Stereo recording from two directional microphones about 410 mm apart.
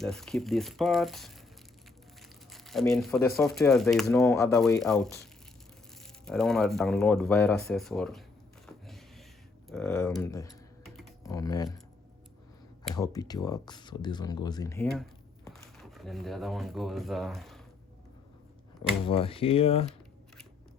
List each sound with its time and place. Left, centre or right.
0.0 s speech: centre
2.5 s speech: centre
6.2 s speech: centre
8.6 s a sound: centre
9.6 s speech: centre
12.8 s speech: centre
19.0 s speech: centre